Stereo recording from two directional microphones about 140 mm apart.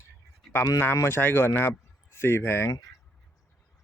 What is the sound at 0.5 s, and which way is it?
Speech, 25° left (ahead or behind).